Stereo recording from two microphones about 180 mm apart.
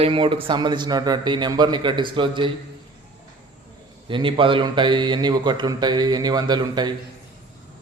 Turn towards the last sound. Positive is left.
turn(degrees=-25)  # may be behind; listen again after turning